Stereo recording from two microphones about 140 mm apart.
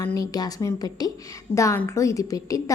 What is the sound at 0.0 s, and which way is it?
A woman's voice, 25° left (ahead or behind).